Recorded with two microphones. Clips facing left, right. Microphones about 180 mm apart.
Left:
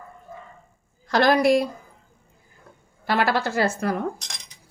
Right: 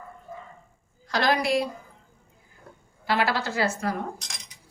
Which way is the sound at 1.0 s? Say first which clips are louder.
Left 6 dB; 55° left (ahead or behind).